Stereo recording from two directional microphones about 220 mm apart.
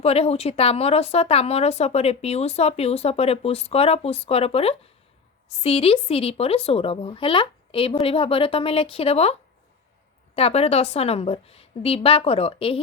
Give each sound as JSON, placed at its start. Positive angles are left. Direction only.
{"t": 0.0, "sound": "speech", "side_deg": 30}